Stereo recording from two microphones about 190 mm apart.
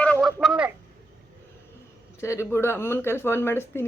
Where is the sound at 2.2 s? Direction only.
15° left (ahead or behind).